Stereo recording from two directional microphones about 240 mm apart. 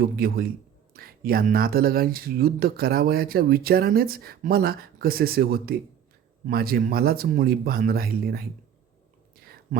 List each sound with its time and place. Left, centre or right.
0.0 s speech: right